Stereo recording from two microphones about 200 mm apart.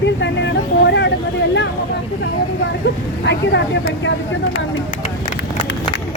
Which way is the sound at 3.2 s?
60° left (ahead or behind).